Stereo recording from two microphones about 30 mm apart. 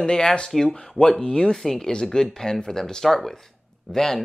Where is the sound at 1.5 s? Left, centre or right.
Centre.